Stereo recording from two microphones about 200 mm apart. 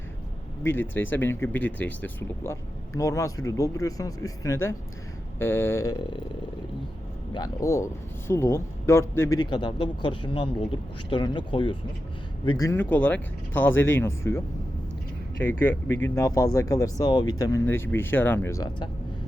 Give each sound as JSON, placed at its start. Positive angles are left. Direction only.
{"t": 0.6, "sound": "speech", "side_deg": 10}
{"t": 7.3, "sound": "speech", "side_deg": 15}
{"t": 15.4, "sound": "speech", "side_deg": 10}